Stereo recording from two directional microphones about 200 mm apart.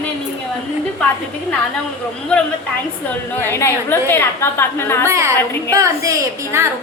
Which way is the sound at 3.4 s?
10° left (ahead or behind).